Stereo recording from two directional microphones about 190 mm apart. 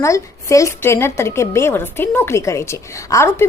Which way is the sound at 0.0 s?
15° left (ahead or behind).